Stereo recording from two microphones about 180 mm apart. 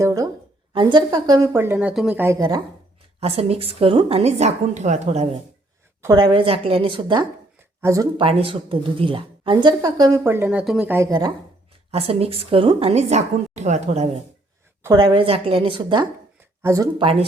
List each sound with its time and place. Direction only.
0.0 s a sound: 20° right (ahead or behind)
0.7 s speech: 25° right (ahead or behind); by 2.2 s 5° right (ahead or behind)
2.2 s a woman's voice: 20° right (ahead or behind)
3.2 s a woman's voice: 35° right (ahead or behind)
6.0 s a woman's voice: 20° right (ahead or behind)
7.8 s speech: 15° right (ahead or behind)
8.2 s a woman's voice: 30° right (ahead or behind); by 11.1 s 10° right (ahead or behind)
11.9 s a woman's voice: 35° right (ahead or behind)
14.8 s a woman's voice: 25° right (ahead or behind)